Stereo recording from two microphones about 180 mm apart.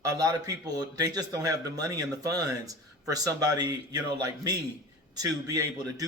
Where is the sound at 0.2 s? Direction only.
20° right (ahead or behind).